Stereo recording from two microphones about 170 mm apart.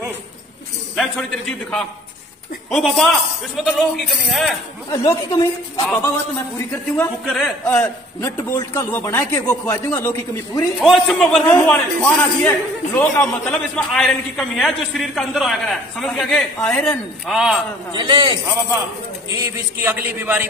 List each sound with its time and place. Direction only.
0.9 s a man's voice: 5° left (ahead or behind)
5.0 s a man's voice: 20° left (ahead or behind)
7.0 s a man's voice: 5° left (ahead or behind)
10.8 s a man's voice: centre (ahead or behind)
13.6 s a man's voice: 5° left (ahead or behind)
17.9 s a man's voice: 25° right (ahead or behind)
19.3 s a man's voice: 15° right (ahead or behind)